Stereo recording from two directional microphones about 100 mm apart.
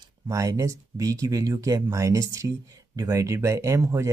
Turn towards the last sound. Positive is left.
turn(degrees=-30)  # may be behind; listen again after turning